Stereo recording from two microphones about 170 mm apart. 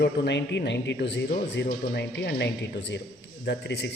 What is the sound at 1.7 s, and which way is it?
A man's voice, 75° left (ahead or behind).